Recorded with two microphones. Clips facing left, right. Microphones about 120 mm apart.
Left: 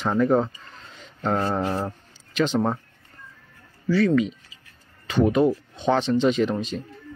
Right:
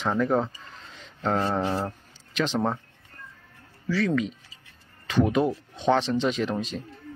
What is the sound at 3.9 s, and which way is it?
Speech, centre (ahead or behind).